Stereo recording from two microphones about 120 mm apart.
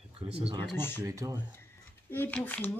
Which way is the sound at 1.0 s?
30° right (ahead or behind).